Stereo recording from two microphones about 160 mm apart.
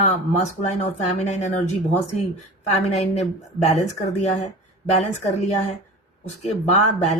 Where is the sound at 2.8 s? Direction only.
45° left (ahead or behind).